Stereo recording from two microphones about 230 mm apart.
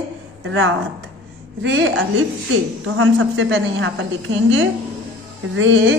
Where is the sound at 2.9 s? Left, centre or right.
Right.